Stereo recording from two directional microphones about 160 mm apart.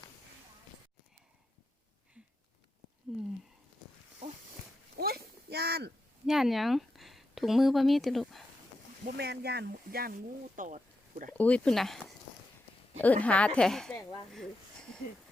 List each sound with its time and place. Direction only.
3.1 s speech: centre (ahead or behind)
4.9 s a sound: 75° right (ahead or behind); by 5.9 s 90° right
6.2 s speech: centre (ahead or behind)
9.1 s speech: 90° right; by 11.3 s 55° right (ahead or behind)
11.3 s speech: 10° left (ahead or behind)
13.2 s speech: 10° left (ahead or behind)